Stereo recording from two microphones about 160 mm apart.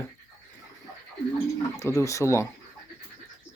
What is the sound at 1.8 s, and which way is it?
Speech, 20° left (ahead or behind).